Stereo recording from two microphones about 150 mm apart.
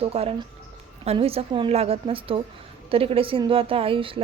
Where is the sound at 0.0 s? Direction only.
40° right (ahead or behind).